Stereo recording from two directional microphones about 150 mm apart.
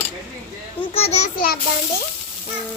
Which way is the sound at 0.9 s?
45° left (ahead or behind).